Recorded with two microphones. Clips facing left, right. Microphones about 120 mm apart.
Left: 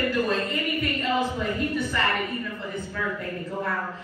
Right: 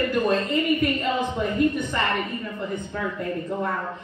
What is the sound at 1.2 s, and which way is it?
Speech, 20° right (ahead or behind).